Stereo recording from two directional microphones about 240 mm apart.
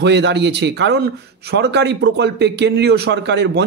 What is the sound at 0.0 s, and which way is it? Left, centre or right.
Speech, right.